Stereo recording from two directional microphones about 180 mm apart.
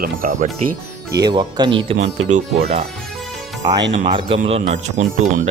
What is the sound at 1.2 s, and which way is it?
Speech, 25° right (ahead or behind).